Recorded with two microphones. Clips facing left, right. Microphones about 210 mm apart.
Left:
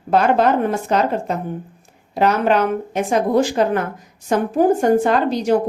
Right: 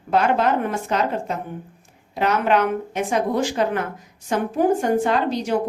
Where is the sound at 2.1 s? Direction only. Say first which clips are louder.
Left 3 dB; 35° left (ahead or behind).